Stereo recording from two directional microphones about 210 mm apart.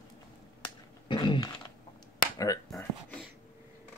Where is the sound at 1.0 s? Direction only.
20° left (ahead or behind).